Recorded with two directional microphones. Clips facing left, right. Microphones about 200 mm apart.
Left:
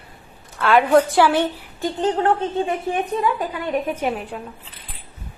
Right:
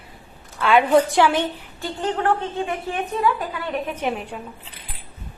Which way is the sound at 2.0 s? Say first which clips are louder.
Left 2 dB; 20° left (ahead or behind).